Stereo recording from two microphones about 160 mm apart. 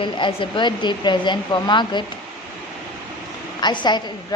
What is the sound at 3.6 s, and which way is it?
Speech, 25° left (ahead or behind).